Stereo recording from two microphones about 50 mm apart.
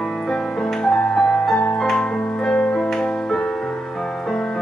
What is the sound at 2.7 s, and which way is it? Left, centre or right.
Music, centre.